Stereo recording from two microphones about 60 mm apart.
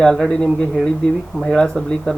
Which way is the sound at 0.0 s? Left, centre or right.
Centre.